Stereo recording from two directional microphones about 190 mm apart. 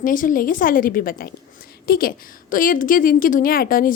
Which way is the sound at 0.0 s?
45° left (ahead or behind).